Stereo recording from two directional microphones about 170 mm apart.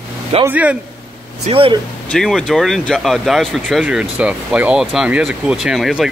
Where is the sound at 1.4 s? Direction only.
30° right (ahead or behind).